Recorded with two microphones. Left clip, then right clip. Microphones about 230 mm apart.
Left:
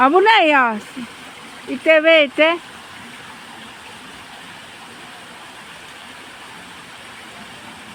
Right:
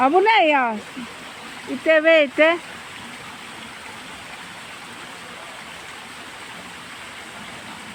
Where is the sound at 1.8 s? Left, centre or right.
Centre.